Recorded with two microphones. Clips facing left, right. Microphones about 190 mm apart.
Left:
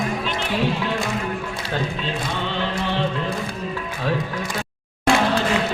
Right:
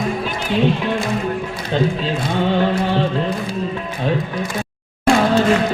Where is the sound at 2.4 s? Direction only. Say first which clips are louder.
Right 11 dB; 45° right (ahead or behind).